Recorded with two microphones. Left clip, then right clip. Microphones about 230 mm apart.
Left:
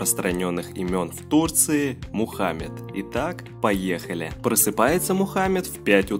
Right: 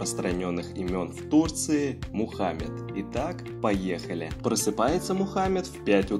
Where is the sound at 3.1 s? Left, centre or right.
Left.